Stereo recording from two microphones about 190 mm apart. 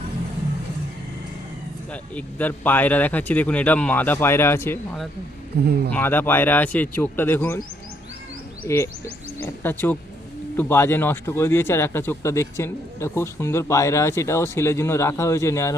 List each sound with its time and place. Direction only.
1.9 s speech: 10° left (ahead or behind)
5.5 s speech: 60° right (ahead or behind)
5.9 s speech: 10° left (ahead or behind)
8.6 s speech: 15° left (ahead or behind)